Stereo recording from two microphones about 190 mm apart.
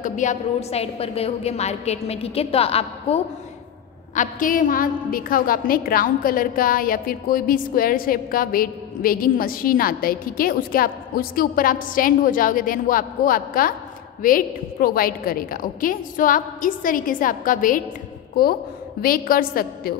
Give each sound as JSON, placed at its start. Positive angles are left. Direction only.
{"t": 0.0, "sound": "a woman's voice", "side_deg": 40}
{"t": 4.1, "sound": "a woman's voice", "side_deg": 45}